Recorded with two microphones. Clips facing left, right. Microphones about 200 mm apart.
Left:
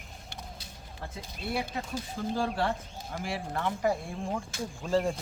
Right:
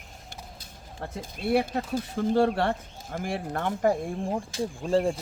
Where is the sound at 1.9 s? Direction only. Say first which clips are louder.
Right 9 dB; 55° right (ahead or behind).